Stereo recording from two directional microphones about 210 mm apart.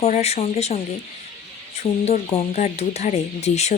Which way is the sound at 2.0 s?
30° left (ahead or behind).